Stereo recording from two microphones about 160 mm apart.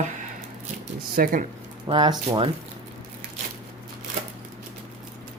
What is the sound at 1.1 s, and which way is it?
Speech, 60° right (ahead or behind).